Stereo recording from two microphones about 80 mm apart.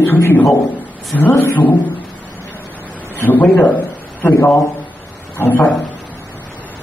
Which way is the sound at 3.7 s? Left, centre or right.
Left.